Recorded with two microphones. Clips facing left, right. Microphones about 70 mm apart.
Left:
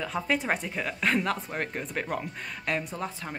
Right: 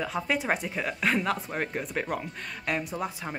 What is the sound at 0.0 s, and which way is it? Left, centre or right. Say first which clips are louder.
A woman's voice: even; centre.